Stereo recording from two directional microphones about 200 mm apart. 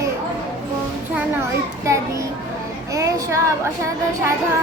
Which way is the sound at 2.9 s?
15° right (ahead or behind).